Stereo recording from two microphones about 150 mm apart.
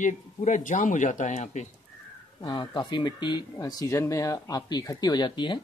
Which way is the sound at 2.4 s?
30° left (ahead or behind).